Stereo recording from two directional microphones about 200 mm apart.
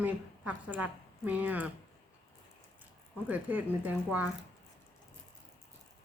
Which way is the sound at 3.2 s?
10° right (ahead or behind).